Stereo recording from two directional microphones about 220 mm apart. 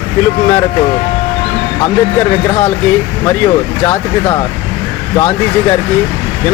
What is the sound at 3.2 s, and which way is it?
Speech, 10° left (ahead or behind).